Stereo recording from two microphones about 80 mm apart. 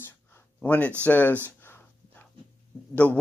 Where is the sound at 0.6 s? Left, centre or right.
Centre.